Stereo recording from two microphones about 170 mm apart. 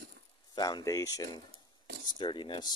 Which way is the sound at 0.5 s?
20° left (ahead or behind).